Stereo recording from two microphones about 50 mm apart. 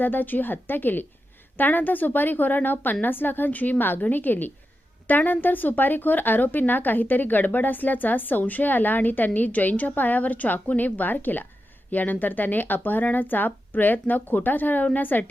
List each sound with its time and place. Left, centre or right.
0.0 s a woman's voice: left